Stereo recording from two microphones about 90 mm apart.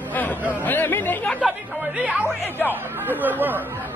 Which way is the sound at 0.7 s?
25° left (ahead or behind).